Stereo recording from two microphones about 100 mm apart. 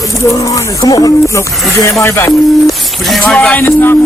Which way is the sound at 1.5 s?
Centre (ahead or behind).